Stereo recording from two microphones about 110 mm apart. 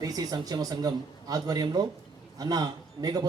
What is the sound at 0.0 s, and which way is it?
Speech, 35° right (ahead or behind).